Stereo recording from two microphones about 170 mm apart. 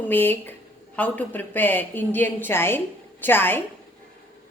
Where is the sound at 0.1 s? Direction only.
10° left (ahead or behind).